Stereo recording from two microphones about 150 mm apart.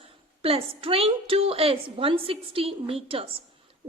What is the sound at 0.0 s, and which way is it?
A woman's voice, 40° right (ahead or behind).